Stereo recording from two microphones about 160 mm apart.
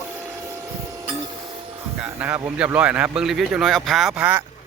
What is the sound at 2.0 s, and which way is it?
Speech, 10° right (ahead or behind).